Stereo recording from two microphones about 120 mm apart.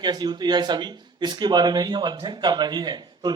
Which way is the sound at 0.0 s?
35° right (ahead or behind).